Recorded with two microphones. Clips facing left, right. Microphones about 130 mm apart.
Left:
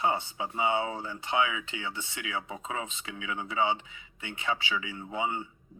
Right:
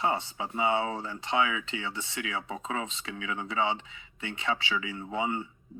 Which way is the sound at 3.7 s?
30° right (ahead or behind).